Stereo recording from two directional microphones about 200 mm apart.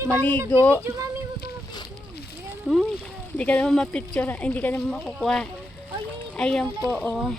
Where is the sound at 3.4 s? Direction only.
5° left (ahead or behind).